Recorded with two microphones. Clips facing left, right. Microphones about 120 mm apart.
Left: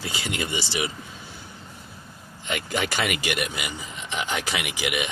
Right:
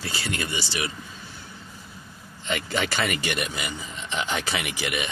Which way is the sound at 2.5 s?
10° left (ahead or behind).